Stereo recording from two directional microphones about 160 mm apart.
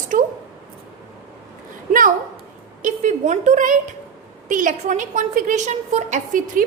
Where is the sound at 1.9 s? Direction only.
60° right (ahead or behind).